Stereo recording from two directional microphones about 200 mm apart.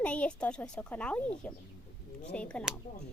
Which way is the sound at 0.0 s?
5° left (ahead or behind).